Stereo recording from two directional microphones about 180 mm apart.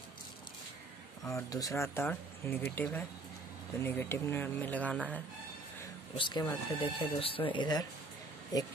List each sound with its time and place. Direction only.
1.2 s speech: 20° left (ahead or behind)
6.1 s speech: 25° left (ahead or behind)